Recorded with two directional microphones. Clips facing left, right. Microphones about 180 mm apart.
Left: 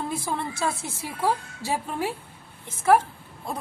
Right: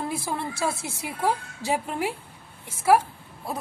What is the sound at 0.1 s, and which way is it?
A woman's voice, 10° right (ahead or behind).